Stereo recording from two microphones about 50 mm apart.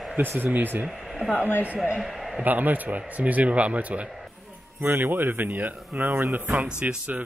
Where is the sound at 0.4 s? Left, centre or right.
Right.